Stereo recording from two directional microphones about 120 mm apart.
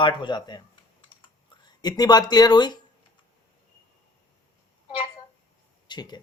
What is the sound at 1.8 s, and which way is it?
Speech, 35° left (ahead or behind).